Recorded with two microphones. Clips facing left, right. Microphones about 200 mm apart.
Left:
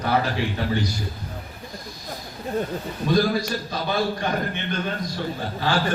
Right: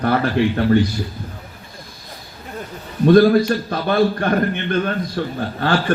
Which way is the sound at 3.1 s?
55° right (ahead or behind).